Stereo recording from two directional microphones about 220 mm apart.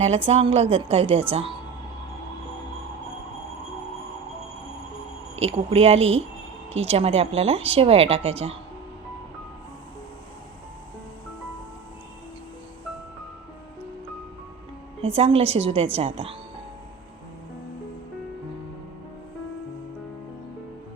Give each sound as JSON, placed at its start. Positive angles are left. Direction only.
{"t": 0.3, "sound": "speech", "side_deg": -25}
{"t": 5.4, "sound": "speech", "side_deg": -25}
{"t": 15.0, "sound": "speech", "side_deg": -25}